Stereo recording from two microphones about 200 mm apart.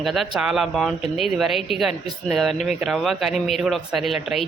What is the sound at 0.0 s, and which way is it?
Speech, centre (ahead or behind).